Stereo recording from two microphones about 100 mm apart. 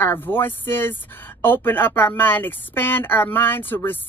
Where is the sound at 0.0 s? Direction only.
25° left (ahead or behind).